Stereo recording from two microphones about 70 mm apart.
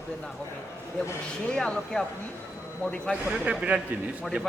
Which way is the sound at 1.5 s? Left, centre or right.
Centre.